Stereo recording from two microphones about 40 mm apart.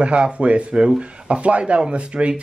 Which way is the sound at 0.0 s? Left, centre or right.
Right.